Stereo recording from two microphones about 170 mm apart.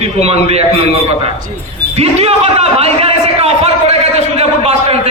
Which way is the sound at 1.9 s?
35° right (ahead or behind).